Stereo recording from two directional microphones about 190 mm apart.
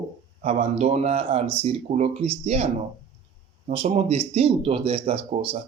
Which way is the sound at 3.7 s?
30° right (ahead or behind).